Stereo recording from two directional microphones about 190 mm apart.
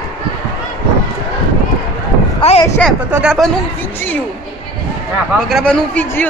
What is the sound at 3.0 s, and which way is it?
Speech, 5° right (ahead or behind).